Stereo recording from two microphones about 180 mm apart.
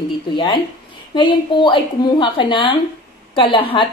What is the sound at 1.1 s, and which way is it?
Speech, 25° left (ahead or behind).